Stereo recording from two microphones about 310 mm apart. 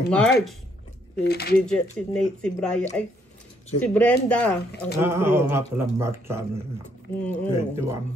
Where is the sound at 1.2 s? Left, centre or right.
Left.